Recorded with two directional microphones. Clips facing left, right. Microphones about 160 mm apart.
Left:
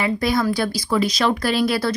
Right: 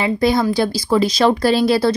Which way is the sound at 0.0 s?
25° right (ahead or behind).